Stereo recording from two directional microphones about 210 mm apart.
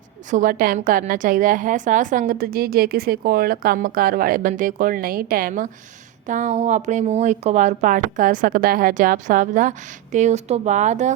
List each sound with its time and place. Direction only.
0.3 s a woman's voice: 40° right (ahead or behind)